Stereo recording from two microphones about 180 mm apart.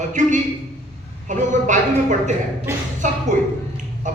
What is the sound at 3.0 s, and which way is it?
Speech, 45° right (ahead or behind).